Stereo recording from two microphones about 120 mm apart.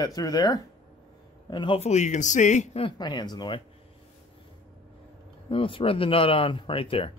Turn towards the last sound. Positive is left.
turn(degrees=50)  # may be behind; listen again after turning